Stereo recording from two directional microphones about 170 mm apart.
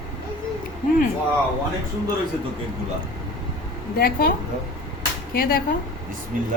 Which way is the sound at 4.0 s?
60° left (ahead or behind).